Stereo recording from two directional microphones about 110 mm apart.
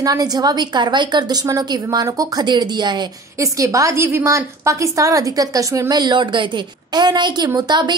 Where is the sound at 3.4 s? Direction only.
30° right (ahead or behind).